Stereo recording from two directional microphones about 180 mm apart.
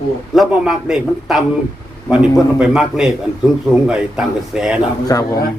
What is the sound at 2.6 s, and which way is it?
Speech, 5° right (ahead or behind).